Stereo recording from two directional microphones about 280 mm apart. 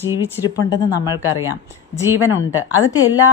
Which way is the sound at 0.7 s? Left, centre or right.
Centre.